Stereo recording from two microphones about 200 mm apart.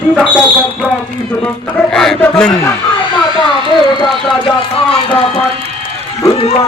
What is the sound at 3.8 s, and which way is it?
Speech, 25° left (ahead or behind).